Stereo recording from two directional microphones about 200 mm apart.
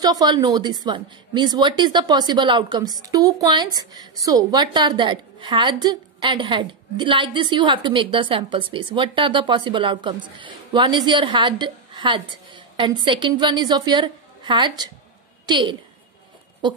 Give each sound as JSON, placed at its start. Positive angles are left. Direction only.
{"t": 0.0, "sound": "a woman's voice", "side_deg": -20}